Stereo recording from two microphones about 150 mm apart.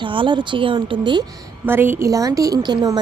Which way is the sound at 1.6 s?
15° right (ahead or behind).